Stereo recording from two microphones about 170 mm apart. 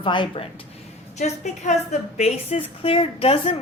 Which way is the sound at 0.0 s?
30° left (ahead or behind).